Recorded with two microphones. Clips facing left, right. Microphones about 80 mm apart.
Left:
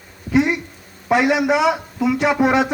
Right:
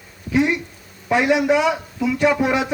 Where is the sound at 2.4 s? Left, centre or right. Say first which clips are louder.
Left 4 dB; left.